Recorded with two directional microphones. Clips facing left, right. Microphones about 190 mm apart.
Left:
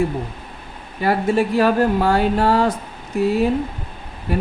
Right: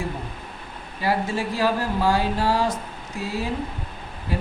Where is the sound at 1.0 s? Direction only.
60° left (ahead or behind).